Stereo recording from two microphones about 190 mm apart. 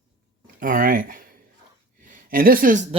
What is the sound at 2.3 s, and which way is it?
Speech, 50° right (ahead or behind).